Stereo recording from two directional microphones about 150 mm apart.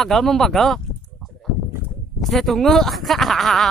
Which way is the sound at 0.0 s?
Centre (ahead or behind).